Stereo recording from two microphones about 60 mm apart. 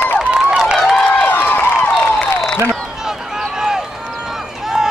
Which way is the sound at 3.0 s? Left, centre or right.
Centre.